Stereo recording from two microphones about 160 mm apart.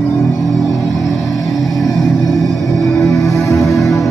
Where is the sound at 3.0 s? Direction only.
20° left (ahead or behind).